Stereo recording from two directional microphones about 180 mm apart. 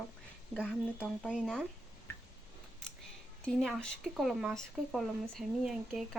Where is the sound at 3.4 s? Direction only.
5° left (ahead or behind).